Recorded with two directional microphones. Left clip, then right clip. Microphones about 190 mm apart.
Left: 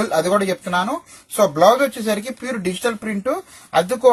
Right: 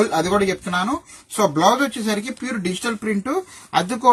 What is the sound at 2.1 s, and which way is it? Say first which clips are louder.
Speech: left 1 dB; 35° left (ahead or behind).